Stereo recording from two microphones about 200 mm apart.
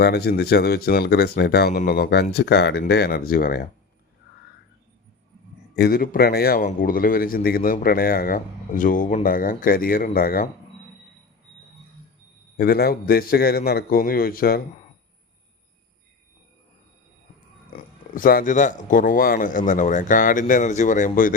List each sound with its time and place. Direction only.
0.0 s a man's voice: 55° left (ahead or behind)
5.7 s a man's voice: 50° left (ahead or behind)
12.5 s a man's voice: 50° left (ahead or behind)
17.7 s speech: 45° left (ahead or behind)